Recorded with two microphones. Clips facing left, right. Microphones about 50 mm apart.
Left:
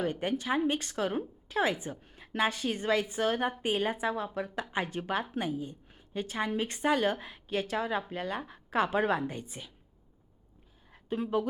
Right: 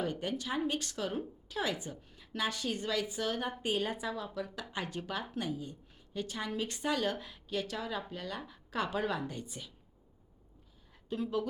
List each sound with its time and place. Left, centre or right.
0.0 s a woman's voice: left
11.1 s a woman's voice: left